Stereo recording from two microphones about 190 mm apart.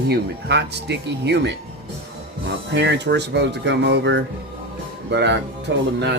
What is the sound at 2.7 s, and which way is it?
Speech, 65° right (ahead or behind).